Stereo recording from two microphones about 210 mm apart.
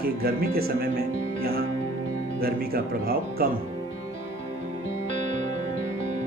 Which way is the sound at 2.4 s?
45° right (ahead or behind).